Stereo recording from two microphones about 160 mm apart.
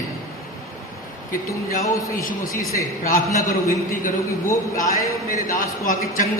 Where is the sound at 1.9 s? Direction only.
60° left (ahead or behind).